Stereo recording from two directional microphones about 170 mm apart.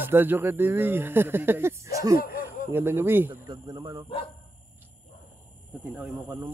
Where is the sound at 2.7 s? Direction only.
15° right (ahead or behind).